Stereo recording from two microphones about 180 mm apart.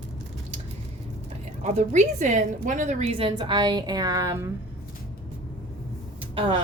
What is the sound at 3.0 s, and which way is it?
A woman's voice, 30° right (ahead or behind).